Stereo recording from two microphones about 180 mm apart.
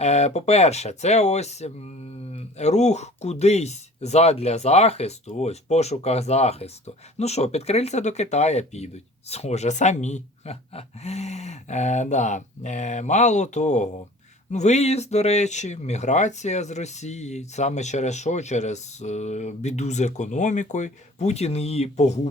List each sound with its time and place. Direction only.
0.0 s speech: 35° left (ahead or behind)